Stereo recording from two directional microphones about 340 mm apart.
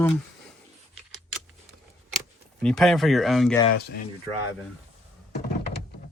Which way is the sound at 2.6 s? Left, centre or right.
Centre.